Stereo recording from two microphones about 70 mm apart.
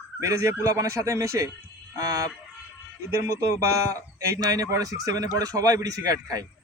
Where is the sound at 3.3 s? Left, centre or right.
Right.